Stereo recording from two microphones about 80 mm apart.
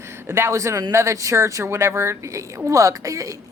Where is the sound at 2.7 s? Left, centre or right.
Right.